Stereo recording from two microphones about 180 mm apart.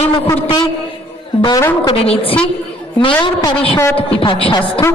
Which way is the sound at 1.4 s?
20° left (ahead or behind).